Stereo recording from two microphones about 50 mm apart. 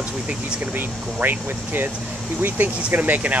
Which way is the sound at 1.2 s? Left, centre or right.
Right.